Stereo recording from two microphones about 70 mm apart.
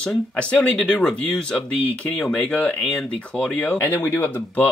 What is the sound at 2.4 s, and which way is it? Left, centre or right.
Speech, centre.